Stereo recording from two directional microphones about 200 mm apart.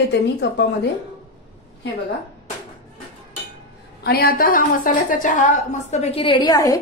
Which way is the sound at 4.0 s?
50° left (ahead or behind).